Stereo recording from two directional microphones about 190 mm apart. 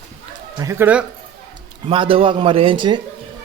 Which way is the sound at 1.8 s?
30° right (ahead or behind).